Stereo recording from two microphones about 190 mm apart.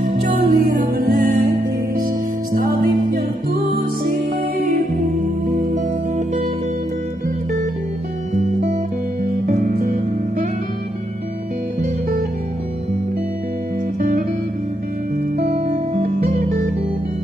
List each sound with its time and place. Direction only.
0.0 s music: 50° right (ahead or behind)
9.5 s music: 45° right (ahead or behind)
13.9 s music: 45° right (ahead or behind)
15.3 s music: 45° right (ahead or behind)